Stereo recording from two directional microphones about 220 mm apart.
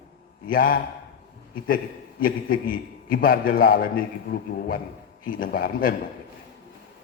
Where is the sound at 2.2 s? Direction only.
40° left (ahead or behind).